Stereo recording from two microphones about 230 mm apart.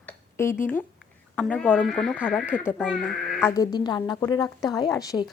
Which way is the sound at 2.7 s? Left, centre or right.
Centre.